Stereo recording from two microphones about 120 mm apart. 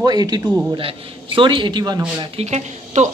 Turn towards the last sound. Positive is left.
turn(degrees=-70)  # may be behind; listen again after turning